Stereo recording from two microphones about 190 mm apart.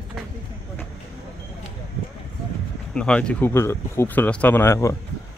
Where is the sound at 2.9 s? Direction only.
5° left (ahead or behind).